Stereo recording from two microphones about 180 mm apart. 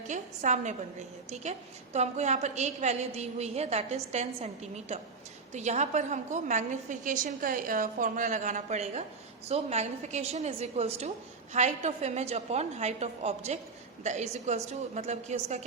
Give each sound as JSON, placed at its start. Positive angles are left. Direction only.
{"t": 0.1, "sound": "a woman's voice", "side_deg": -40}